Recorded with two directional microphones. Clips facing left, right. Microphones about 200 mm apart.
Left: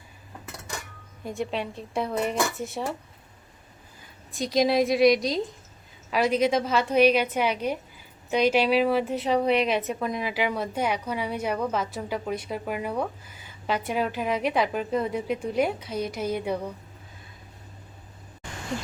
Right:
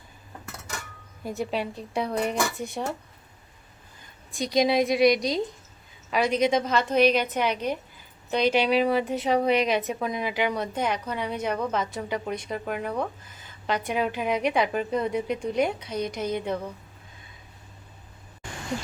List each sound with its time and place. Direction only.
1.2 s speech: 5° right (ahead or behind)
4.3 s a woman's voice: centre (ahead or behind)